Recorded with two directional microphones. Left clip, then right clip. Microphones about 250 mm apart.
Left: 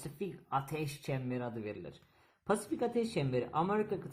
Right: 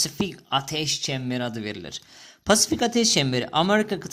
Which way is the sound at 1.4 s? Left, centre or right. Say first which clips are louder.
Right 10 dB; right.